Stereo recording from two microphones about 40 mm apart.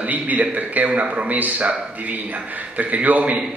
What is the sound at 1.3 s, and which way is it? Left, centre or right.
A man's voice, right.